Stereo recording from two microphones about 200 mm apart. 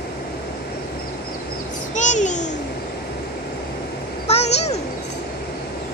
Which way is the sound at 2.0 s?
35° left (ahead or behind).